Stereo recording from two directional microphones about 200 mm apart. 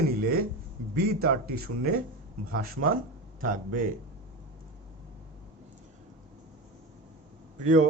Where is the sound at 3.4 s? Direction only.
40° right (ahead or behind).